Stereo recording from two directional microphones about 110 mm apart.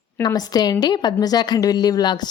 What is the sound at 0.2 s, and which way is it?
A woman's voice, 35° left (ahead or behind).